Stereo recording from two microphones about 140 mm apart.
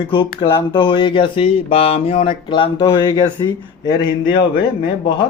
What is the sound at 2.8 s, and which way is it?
Speech, 25° left (ahead or behind).